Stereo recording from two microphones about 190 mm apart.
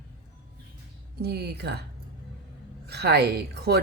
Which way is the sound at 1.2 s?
55° right (ahead or behind).